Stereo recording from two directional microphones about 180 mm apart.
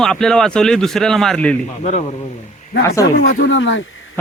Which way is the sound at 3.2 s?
55° left (ahead or behind).